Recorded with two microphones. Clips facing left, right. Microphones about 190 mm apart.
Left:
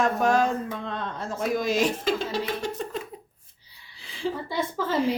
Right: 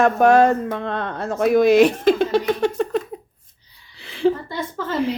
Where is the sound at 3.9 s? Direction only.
65° right (ahead or behind).